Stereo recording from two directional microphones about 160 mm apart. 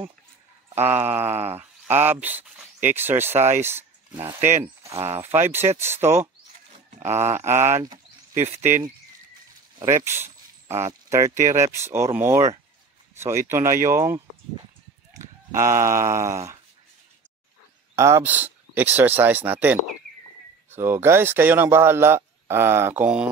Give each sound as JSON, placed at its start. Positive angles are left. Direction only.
{"t": 0.7, "sound": "speech", "side_deg": -10}
{"t": 9.8, "sound": "speech", "side_deg": -15}
{"t": 15.2, "sound": "a sound", "side_deg": -15}
{"t": 15.5, "sound": "speech", "side_deg": -15}
{"t": 17.9, "sound": "speech", "side_deg": -20}